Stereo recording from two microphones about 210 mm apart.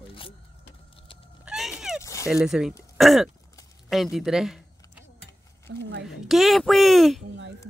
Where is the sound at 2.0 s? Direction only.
15° left (ahead or behind).